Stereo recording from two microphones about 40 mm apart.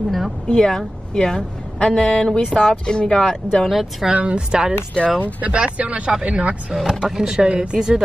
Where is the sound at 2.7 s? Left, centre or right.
Left.